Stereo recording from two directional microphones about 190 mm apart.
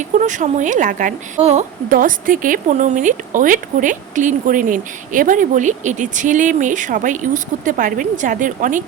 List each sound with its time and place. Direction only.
0.2 s a woman's voice: 40° right (ahead or behind)